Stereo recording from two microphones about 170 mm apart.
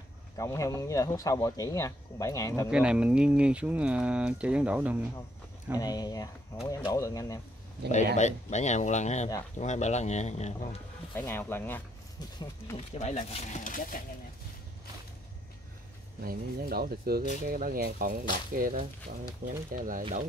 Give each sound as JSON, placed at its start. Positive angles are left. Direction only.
{"t": 0.4, "sound": "speech", "side_deg": 20}
{"t": 2.7, "sound": "speech", "side_deg": -5}
{"t": 5.8, "sound": "speech", "side_deg": 25}
{"t": 8.2, "sound": "speech", "side_deg": 45}
{"t": 11.1, "sound": "speech", "side_deg": 10}
{"t": 12.7, "sound": "speech", "side_deg": 40}
{"t": 16.2, "sound": "speech", "side_deg": -60}